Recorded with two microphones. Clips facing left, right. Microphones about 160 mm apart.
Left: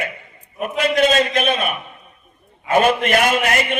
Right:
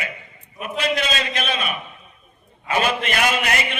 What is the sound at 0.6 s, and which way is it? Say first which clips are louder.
A man's voice: left 7 dB; 50° left (ahead or behind).